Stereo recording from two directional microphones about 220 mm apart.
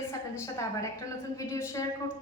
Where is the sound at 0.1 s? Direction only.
10° left (ahead or behind).